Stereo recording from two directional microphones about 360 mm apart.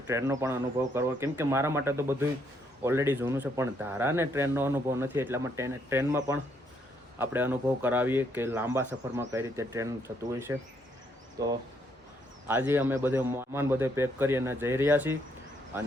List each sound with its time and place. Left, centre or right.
0.1 s speech: centre
12.5 s speech: centre